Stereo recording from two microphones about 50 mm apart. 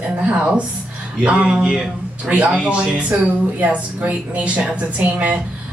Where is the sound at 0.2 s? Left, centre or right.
Right.